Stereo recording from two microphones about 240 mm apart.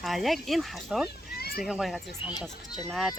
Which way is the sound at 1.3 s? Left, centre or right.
Left.